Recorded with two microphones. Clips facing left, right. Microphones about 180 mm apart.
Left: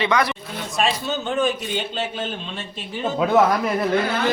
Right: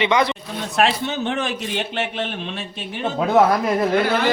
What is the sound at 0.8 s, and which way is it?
A man's voice, 75° right (ahead or behind).